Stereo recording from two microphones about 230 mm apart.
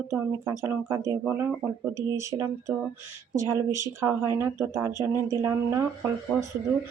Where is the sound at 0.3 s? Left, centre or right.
Centre.